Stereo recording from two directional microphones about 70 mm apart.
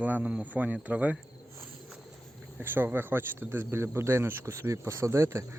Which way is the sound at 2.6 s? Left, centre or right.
Right.